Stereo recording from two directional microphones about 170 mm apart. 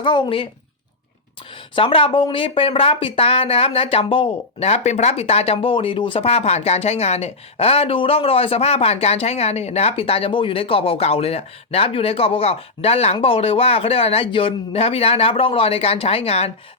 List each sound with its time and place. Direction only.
0.0 s speech: 30° left (ahead or behind)
1.7 s speech: 30° left (ahead or behind)